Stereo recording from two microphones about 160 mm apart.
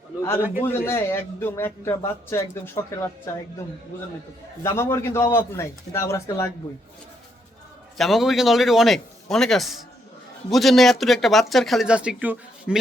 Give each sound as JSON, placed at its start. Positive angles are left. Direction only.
{"t": 0.6, "sound": "a man's voice", "side_deg": 15}
{"t": 4.6, "sound": "a man's voice", "side_deg": 15}
{"t": 7.9, "sound": "speech", "side_deg": 0}